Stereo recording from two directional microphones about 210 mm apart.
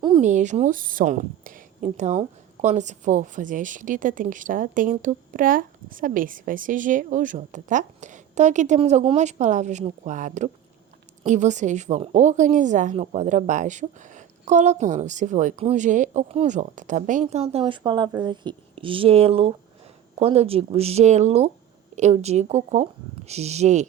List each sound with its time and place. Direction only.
0.2 s a woman's voice: 35° right (ahead or behind)